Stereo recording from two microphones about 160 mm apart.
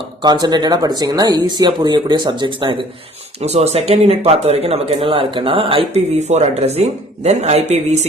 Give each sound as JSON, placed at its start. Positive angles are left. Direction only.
{"t": 0.2, "sound": "speech", "side_deg": -25}
{"t": 3.4, "sound": "speech", "side_deg": -40}